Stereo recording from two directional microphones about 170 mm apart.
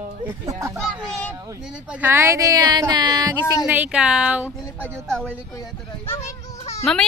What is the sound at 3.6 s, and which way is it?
A woman's voice, 10° right (ahead or behind).